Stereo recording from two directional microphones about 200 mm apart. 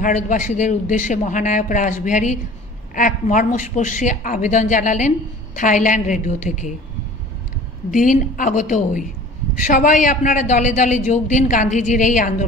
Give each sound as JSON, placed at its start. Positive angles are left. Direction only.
{"t": 0.0, "sound": "a man's voice", "side_deg": 40}
{"t": 7.9, "sound": "a man's voice", "side_deg": 40}